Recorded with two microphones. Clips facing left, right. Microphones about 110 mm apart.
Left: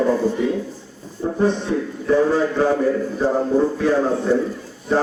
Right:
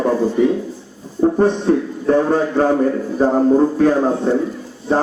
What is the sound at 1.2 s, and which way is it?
A man's voice, 50° right (ahead or behind).